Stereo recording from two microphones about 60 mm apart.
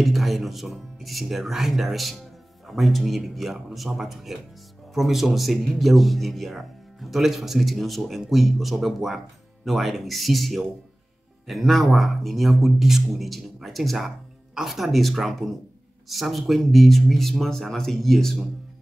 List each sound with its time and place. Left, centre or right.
0.0 s a man's voice: centre